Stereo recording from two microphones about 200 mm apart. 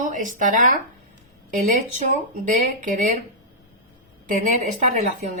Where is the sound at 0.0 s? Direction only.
40° right (ahead or behind).